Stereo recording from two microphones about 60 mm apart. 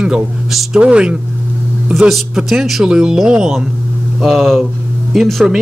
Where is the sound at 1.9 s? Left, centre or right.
Centre.